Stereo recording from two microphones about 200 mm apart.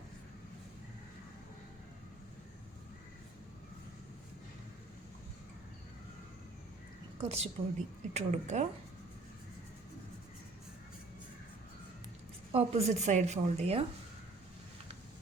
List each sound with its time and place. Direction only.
7.2 s a woman's voice: 30° right (ahead or behind)
12.5 s a woman's voice: 30° right (ahead or behind)